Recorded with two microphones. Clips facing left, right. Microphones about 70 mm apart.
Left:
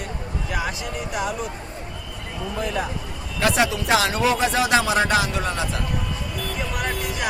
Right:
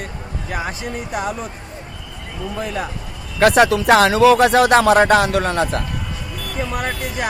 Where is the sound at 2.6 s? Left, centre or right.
Right.